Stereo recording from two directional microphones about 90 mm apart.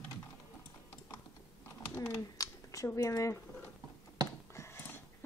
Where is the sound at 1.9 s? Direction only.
35° left (ahead or behind).